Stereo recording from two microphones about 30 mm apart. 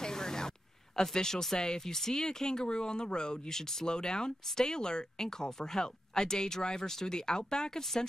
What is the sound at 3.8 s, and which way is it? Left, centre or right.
Speech, left.